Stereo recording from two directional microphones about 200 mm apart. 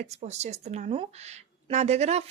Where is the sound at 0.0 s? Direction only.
35° right (ahead or behind).